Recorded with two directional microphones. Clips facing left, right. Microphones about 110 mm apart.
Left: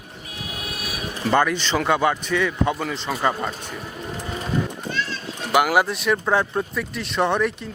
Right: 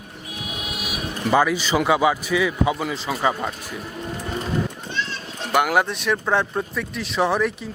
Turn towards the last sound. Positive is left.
turn(degrees=0)  # may be behind; listen again after turning